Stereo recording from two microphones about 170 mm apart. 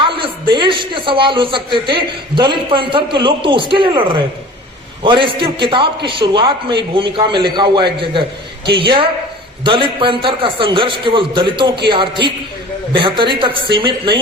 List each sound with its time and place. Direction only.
0.0 s a man's voice: 30° right (ahead or behind)